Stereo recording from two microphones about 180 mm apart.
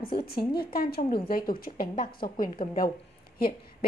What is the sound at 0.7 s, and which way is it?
A woman's voice, 60° left (ahead or behind).